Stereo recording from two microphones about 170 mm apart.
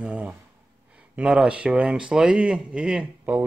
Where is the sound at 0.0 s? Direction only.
5° right (ahead or behind).